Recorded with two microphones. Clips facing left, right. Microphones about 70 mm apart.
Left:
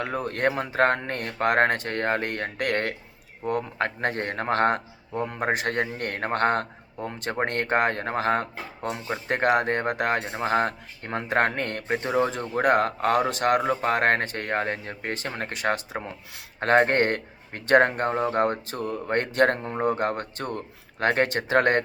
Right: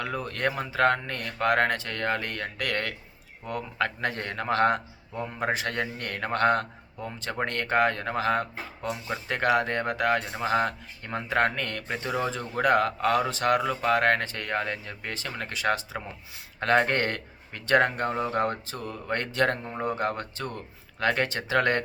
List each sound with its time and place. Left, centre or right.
0.0 s speech: left